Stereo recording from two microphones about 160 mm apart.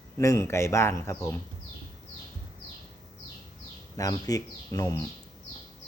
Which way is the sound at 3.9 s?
20° left (ahead or behind).